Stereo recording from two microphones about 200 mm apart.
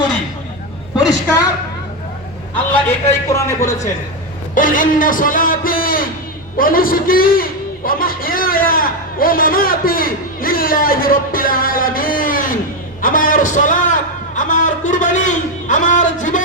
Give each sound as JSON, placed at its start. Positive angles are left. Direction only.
{"t": 2.8, "sound": "a man's voice", "side_deg": 15}
{"t": 4.5, "sound": "a man's voice", "side_deg": 40}
{"t": 13.0, "sound": "a sound", "side_deg": 45}